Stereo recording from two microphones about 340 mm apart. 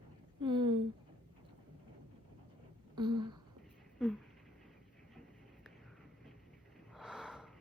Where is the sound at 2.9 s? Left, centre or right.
Centre.